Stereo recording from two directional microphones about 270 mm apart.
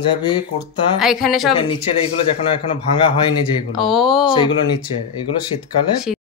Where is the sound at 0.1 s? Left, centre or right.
Centre.